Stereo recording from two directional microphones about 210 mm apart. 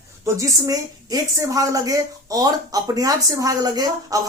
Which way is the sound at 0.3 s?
15° right (ahead or behind).